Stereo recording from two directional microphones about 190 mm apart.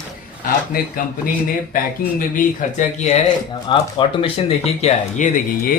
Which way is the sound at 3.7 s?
25° left (ahead or behind).